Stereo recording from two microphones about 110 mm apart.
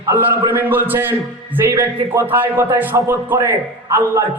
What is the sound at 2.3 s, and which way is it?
A man's voice, 20° right (ahead or behind).